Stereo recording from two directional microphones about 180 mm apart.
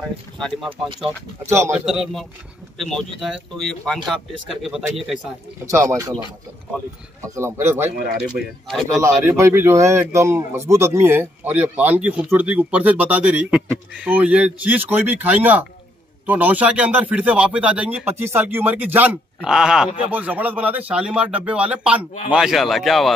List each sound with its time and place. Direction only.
0.7 s speech: 30° right (ahead or behind)
1.4 s speech: 15° right (ahead or behind)
1.7 s a man's voice: centre (ahead or behind)
5.7 s speech: 15° right (ahead or behind)
8.3 s a man's voice: centre (ahead or behind)
8.9 s a man's voice: 15° right (ahead or behind); by 23.1 s centre (ahead or behind)